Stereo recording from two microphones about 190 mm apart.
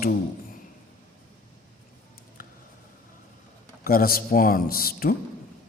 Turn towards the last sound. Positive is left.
turn(degrees=50)  # may be behind; listen again after turning